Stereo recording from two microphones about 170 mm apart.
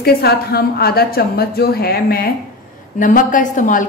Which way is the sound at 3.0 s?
50° left (ahead or behind).